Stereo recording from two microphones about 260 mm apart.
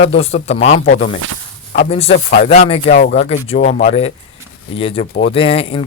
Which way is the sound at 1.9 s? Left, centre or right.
Left.